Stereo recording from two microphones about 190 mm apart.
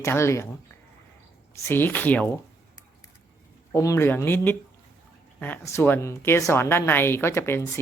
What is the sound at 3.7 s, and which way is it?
Speech, 15° left (ahead or behind).